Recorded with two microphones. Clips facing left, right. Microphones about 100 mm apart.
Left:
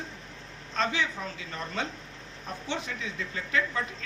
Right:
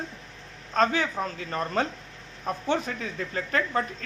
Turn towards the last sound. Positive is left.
turn(degrees=-45)  # may be behind; listen again after turning